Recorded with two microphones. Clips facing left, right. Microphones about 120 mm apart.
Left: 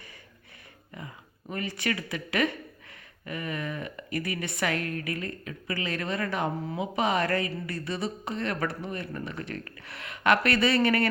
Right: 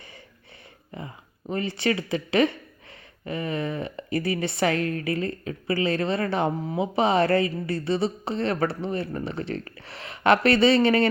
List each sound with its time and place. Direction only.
0.9 s speech: 30° right (ahead or behind)